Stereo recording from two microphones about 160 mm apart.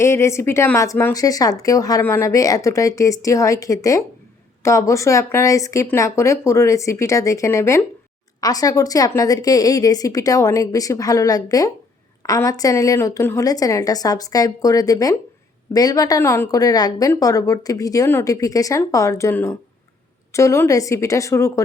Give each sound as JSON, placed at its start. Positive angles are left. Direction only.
{"t": 0.0, "sound": "speech", "side_deg": 15}